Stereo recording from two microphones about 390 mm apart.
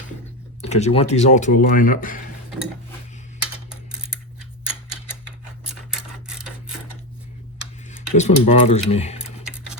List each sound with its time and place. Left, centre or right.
0.6 s speech: centre
3.4 s typing: centre
5.6 s a sound: centre
8.1 s speech: centre